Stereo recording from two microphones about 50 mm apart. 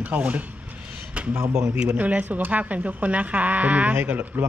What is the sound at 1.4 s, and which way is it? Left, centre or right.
Speech, right.